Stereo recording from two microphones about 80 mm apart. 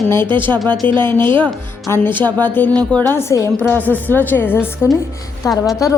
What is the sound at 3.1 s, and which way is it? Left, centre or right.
Speech, left.